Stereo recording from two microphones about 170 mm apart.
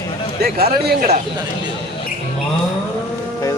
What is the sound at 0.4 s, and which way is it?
Speech, 65° right (ahead or behind).